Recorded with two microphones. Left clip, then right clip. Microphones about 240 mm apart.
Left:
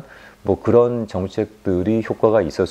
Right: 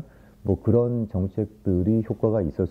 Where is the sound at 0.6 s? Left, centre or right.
Centre.